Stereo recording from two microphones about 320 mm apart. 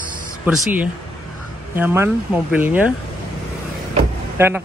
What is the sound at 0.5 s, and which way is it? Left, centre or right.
Speech, centre.